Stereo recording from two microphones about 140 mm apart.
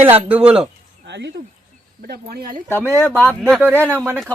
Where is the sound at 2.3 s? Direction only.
90° right.